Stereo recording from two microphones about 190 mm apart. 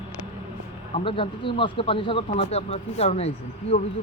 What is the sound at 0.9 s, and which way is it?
Speech, 30° left (ahead or behind).